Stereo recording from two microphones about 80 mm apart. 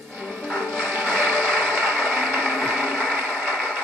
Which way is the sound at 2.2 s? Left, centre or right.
Centre.